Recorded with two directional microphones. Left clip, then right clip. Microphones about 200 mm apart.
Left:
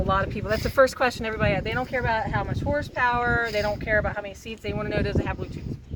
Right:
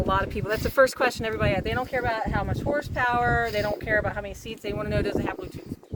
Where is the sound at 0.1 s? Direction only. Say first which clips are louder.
Left 2 dB; 55° right (ahead or behind).